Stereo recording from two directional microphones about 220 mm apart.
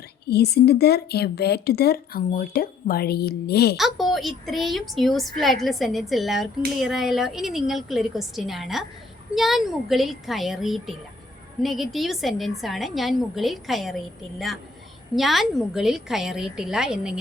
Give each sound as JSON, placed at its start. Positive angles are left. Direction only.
{"t": 0.3, "sound": "speech", "side_deg": 45}
{"t": 3.8, "sound": "a woman's voice", "side_deg": 0}